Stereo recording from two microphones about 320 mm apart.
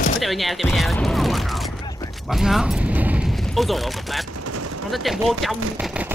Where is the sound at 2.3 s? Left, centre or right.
Centre.